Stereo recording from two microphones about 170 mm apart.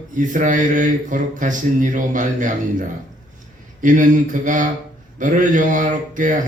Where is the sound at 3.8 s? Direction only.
50° right (ahead or behind).